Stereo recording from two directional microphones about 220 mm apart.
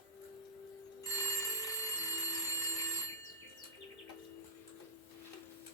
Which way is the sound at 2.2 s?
15° left (ahead or behind).